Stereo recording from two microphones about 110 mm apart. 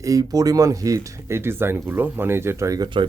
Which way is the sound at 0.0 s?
35° right (ahead or behind).